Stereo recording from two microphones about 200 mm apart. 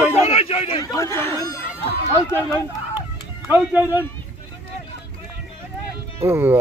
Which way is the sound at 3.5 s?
10° right (ahead or behind).